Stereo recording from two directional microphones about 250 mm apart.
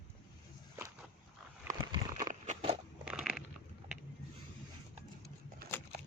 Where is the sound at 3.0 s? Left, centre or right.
Centre.